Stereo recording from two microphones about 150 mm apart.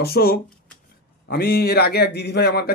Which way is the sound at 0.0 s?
90° left.